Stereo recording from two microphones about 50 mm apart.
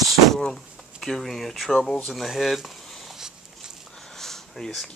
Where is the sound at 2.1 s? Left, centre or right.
Centre.